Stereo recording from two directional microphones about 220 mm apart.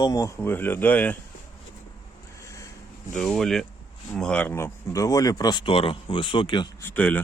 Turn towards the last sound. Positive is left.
turn(degrees=5)  # may be behind; listen again after turning